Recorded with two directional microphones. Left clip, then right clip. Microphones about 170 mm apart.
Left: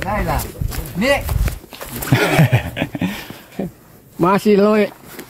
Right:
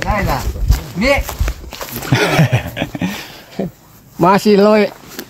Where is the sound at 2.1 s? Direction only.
15° left (ahead or behind).